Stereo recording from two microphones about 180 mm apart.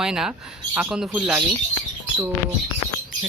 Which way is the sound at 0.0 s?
5° right (ahead or behind).